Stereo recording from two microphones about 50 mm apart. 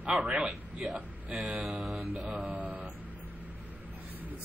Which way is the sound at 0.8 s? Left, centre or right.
Centre.